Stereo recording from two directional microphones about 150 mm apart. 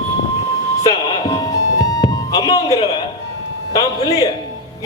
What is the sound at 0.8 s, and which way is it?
Music, 25° left (ahead or behind).